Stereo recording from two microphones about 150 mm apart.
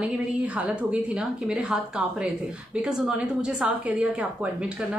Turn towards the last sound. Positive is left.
turn(degrees=-10)  # may be behind; listen again after turning